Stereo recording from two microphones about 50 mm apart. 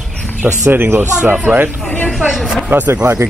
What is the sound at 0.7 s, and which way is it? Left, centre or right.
Speech, right.